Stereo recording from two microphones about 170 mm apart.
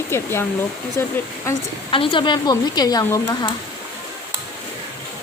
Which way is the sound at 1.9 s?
30° left (ahead or behind).